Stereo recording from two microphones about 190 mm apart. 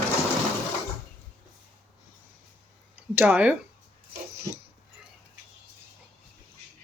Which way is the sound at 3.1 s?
10° right (ahead or behind).